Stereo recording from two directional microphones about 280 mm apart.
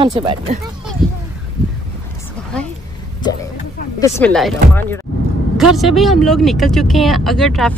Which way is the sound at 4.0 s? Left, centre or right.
Centre.